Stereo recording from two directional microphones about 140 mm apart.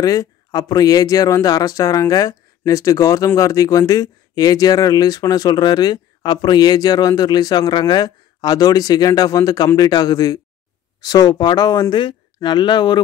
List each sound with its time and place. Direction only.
0.0 s speech: 25° left (ahead or behind)